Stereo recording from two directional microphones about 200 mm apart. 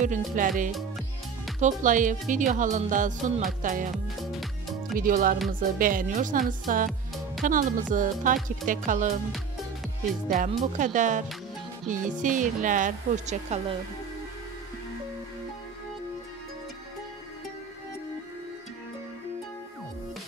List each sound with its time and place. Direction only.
0.0 s speech: 40° right (ahead or behind)
0.7 s music: centre (ahead or behind)
1.6 s speech: 40° right (ahead or behind)
3.9 s music: centre (ahead or behind)
4.9 s a woman's voice: 45° right (ahead or behind)
10.2 s speech: 40° right (ahead or behind)